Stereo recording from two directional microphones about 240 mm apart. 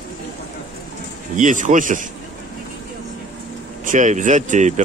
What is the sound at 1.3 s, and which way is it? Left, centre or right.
Speech, right.